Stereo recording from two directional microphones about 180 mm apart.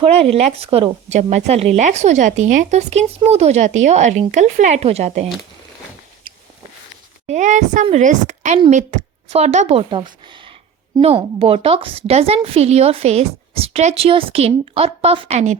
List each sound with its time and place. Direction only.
0.0 s a woman's voice: 35° right (ahead or behind)
7.3 s a woman's voice: 45° right (ahead or behind)